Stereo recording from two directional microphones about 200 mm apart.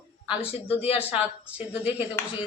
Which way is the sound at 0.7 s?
10° right (ahead or behind).